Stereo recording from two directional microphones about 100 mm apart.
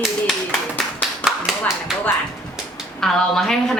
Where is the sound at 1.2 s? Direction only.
15° left (ahead or behind).